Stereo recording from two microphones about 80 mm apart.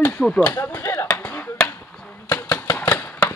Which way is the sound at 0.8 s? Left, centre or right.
Left.